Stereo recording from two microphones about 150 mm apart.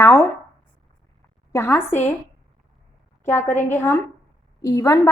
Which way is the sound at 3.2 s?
15° left (ahead or behind).